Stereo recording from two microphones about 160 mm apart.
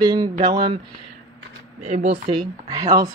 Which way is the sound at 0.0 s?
25° right (ahead or behind).